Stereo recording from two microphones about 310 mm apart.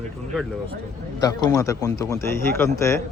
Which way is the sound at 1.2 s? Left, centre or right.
Centre.